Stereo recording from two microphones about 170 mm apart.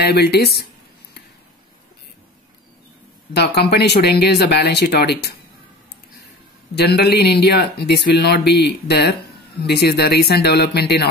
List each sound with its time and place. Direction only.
0.0 s speech: 70° left (ahead or behind)
3.3 s speech: 75° left (ahead or behind)
6.8 s speech: 70° left (ahead or behind)